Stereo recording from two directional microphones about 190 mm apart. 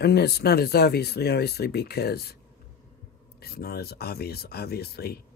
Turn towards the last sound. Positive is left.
turn(degrees=55)  # may be behind; listen again after turning